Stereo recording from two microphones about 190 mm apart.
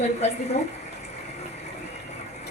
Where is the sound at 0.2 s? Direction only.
35° left (ahead or behind).